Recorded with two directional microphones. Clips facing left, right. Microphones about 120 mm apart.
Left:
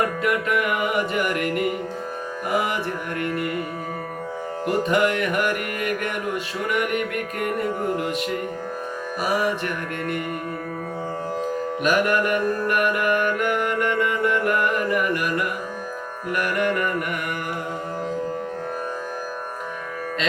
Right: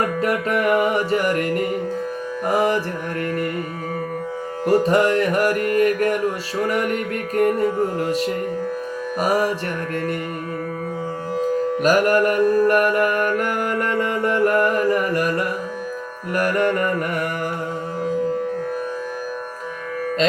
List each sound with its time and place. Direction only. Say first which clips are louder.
0.2 s music: right 2 dB; 35° right (ahead or behind)
4.6 s music: right 4 dB; 35° right (ahead or behind)
9.2 s music: right 3 dB; 40° right (ahead or behind)
11.8 s music: right 4 dB; 35° right (ahead or behind)